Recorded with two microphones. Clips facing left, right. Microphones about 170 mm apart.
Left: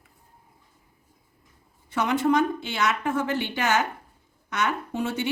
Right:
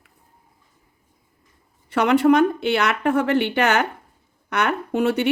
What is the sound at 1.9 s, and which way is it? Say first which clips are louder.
Speech: right 7 dB; 65° right (ahead or behind).